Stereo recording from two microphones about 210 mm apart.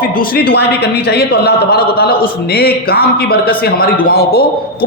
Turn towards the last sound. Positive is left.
turn(degrees=45)  # may be behind; listen again after turning